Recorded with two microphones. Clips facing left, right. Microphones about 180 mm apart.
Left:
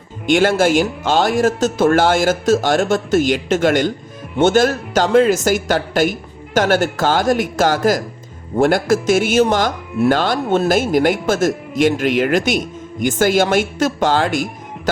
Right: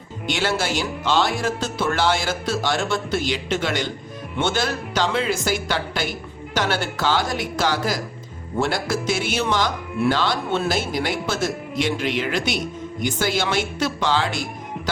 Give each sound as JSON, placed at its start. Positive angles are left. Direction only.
{"t": 0.3, "sound": "speech", "side_deg": 50}